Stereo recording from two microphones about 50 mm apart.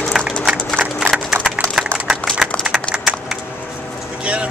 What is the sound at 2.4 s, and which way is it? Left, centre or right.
Typing, centre.